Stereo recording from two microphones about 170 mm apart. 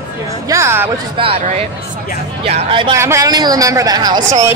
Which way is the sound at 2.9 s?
15° right (ahead or behind).